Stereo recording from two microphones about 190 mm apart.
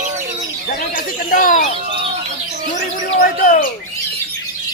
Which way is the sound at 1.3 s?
45° left (ahead or behind).